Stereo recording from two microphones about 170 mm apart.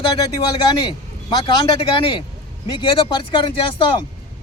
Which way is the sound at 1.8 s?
30° left (ahead or behind).